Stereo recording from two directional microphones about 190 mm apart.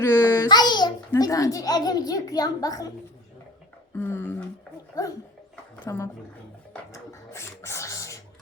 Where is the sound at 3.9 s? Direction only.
10° left (ahead or behind).